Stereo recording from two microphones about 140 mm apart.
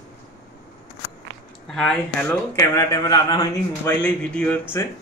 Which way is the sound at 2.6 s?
25° left (ahead or behind).